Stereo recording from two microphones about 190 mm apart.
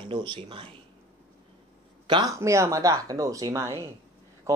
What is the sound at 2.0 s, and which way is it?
Speech, 25° right (ahead or behind).